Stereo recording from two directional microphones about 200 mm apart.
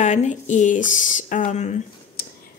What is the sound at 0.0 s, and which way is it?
Speech, 35° left (ahead or behind).